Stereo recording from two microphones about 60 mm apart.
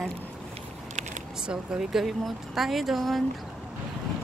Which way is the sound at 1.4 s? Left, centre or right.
Centre.